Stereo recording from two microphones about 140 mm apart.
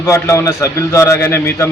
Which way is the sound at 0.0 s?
20° left (ahead or behind).